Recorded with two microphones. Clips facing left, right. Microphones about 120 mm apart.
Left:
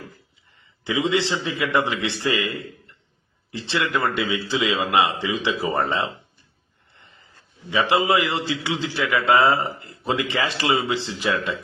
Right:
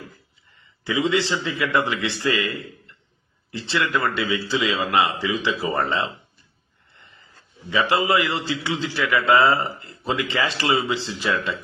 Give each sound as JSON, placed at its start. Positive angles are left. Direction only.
{"t": 0.9, "sound": "speech", "side_deg": 20}
{"t": 7.7, "sound": "speech", "side_deg": 20}